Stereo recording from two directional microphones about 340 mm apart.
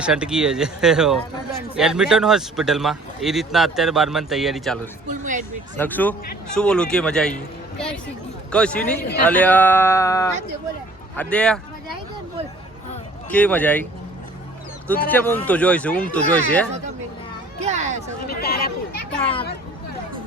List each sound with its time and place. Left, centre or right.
0.0 s speech: centre
5.0 s speech: right
5.7 s speech: centre
13.3 s speech: centre
15.1 s speech: centre
17.6 s a sound: centre
18.3 s speech: left